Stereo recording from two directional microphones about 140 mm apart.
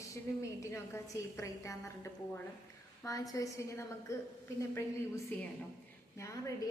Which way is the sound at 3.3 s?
20° left (ahead or behind).